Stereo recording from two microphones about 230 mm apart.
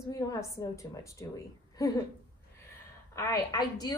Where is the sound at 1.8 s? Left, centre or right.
Centre.